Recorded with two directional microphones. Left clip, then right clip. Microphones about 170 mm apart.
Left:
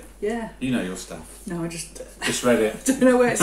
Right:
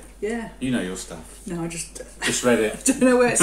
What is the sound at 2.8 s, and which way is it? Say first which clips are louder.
Speech: even; 15° right (ahead or behind).